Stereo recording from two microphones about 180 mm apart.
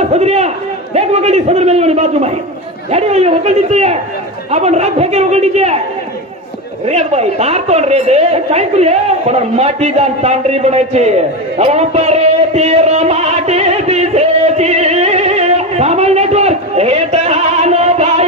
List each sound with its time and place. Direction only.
0.0 s a man's voice: 35° right (ahead or behind)
6.9 s a man's voice: 35° right (ahead or behind)